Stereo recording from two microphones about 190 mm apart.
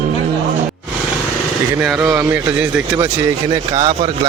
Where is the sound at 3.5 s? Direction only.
20° right (ahead or behind).